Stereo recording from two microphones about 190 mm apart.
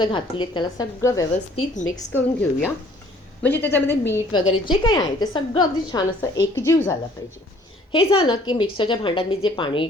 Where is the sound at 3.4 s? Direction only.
10° left (ahead or behind).